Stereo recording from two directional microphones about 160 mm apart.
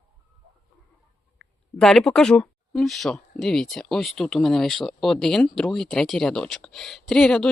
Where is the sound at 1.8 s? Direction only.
5° left (ahead or behind).